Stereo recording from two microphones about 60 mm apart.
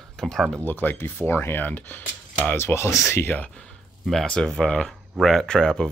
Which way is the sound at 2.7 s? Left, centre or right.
Left.